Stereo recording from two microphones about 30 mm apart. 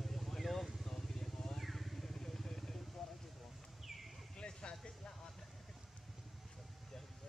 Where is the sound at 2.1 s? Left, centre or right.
Centre.